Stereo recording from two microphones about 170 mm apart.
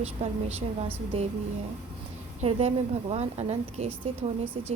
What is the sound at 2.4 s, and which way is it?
A woman's voice, 40° right (ahead or behind).